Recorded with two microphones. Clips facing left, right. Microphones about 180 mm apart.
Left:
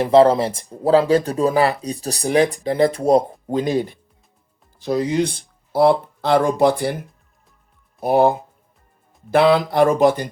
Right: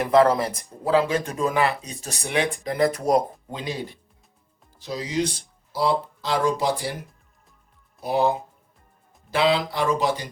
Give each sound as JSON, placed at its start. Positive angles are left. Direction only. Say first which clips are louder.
{"t": 0.0, "sound": "speech", "louder": "left 5 dB", "side_deg": 30}
{"t": 3.4, "sound": "speech", "louder": "left 11 dB", "side_deg": 45}
{"t": 8.0, "sound": "speech", "louder": "left 6 dB", "side_deg": 55}